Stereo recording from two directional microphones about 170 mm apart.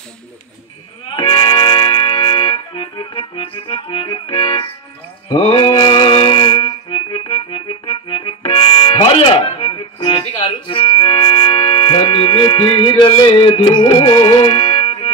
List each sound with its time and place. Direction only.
1.1 s music: 30° left (ahead or behind)